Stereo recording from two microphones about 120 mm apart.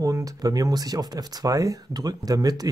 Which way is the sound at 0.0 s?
30° right (ahead or behind).